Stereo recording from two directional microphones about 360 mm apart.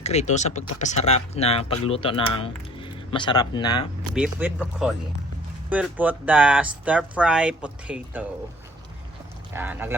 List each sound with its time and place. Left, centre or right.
0.0 s speech: centre
4.1 s speech: centre
9.5 s speech: centre